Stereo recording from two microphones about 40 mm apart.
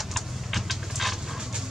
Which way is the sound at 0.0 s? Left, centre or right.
Centre.